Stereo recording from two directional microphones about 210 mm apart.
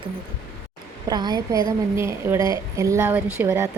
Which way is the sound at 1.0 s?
20° right (ahead or behind).